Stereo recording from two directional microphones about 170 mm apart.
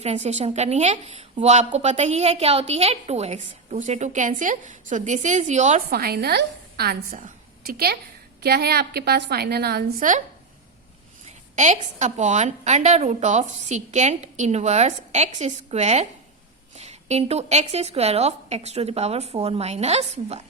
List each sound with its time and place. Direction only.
0.0 s a woman's voice: 40° right (ahead or behind)
5.9 s a woman's voice: 65° right (ahead or behind)
7.2 s a sound: 55° right (ahead or behind)
8.4 s a woman's voice: 70° right (ahead or behind)
10.0 s a woman's voice: 50° right (ahead or behind)
11.5 s a woman's voice: 45° right (ahead or behind)